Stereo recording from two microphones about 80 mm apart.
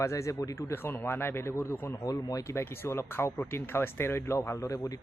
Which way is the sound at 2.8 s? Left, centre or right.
Left.